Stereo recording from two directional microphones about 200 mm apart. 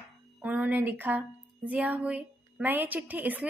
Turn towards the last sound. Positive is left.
turn(degrees=-10)  # may be behind; listen again after turning